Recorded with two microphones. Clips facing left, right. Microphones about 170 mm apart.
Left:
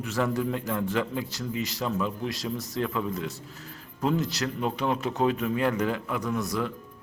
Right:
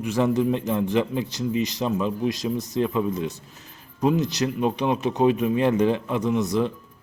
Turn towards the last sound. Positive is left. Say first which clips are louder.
# right 6 dB
turn(degrees=-20)  # may be behind; listen again after turning